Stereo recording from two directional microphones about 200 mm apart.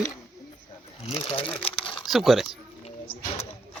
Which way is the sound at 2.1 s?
Centre (ahead or behind).